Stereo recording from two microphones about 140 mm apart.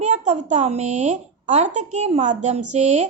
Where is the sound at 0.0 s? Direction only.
55° right (ahead or behind).